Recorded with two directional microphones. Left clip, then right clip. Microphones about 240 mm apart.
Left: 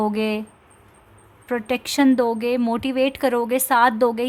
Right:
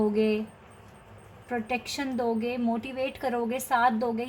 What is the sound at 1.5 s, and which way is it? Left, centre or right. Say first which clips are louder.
A woman's voice: left 7 dB; left.